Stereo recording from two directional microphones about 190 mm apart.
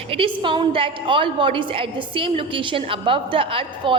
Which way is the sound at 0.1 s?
25° right (ahead or behind).